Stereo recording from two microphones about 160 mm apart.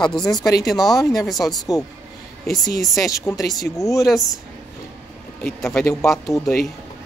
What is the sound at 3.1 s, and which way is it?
Speech, 20° left (ahead or behind).